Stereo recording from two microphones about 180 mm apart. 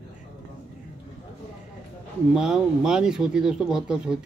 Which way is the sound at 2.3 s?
5° right (ahead or behind).